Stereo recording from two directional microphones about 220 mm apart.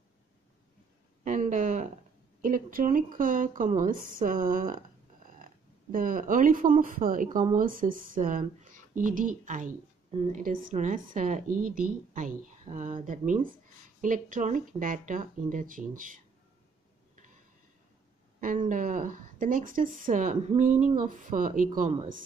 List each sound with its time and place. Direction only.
1.2 s speech: 35° right (ahead or behind)
18.4 s speech: 35° right (ahead or behind)